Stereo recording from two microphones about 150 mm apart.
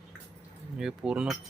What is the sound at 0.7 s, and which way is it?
Cutlery, 5° right (ahead or behind).